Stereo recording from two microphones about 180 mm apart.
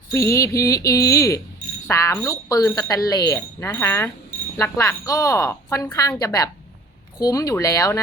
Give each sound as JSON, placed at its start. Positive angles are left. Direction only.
{"t": 0.1, "sound": "a woman's voice", "side_deg": 15}